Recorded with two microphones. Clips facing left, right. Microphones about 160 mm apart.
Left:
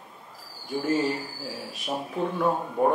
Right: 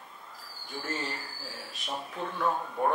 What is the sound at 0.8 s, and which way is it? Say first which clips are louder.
Speech: left 11 dB; 10° left (ahead or behind).